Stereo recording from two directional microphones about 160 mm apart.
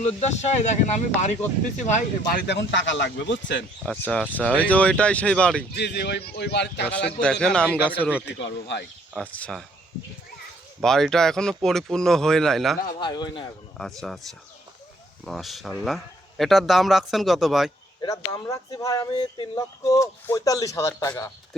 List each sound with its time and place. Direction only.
0.2 s speech: 45° left (ahead or behind)
2.4 s speech: 85° left
3.8 s speech: 5° left (ahead or behind)
5.7 s speech: 90° left
7.2 s speech: 5° left (ahead or behind)
8.3 s speech: 90° left
9.1 s speech: 10° left (ahead or behind)
10.8 s speech: centre (ahead or behind)
13.0 s speech: 25° left (ahead or behind)
13.7 s speech: centre (ahead or behind)
15.2 s speech: centre (ahead or behind)
18.0 s speech: 20° left (ahead or behind)